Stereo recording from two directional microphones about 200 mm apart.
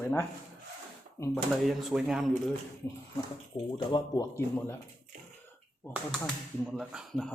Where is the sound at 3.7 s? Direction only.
20° left (ahead or behind).